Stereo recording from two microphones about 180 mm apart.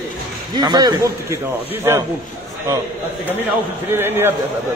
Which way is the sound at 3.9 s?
10° right (ahead or behind).